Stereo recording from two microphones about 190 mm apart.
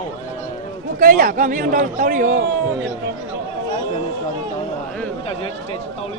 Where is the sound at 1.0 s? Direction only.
45° right (ahead or behind).